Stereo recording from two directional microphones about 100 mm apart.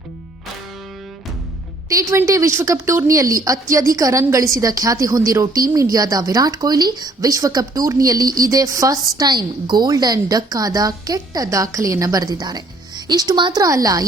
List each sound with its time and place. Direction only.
1.9 s speech: 35° right (ahead or behind)